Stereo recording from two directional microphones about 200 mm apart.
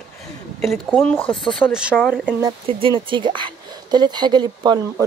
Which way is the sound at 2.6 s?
25° right (ahead or behind).